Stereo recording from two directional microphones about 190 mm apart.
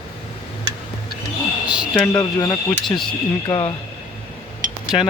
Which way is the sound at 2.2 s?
20° left (ahead or behind).